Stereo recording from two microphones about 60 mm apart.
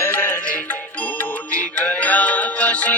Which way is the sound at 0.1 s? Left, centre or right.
Left.